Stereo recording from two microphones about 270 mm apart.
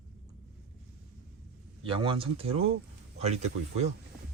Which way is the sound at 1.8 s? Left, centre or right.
Centre.